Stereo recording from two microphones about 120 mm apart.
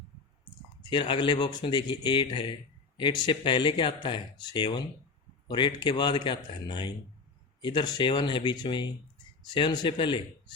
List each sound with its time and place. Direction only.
0.8 s a man's voice: 40° left (ahead or behind)